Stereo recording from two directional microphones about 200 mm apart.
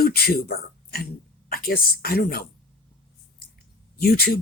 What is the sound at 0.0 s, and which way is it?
Speech, 50° left (ahead or behind).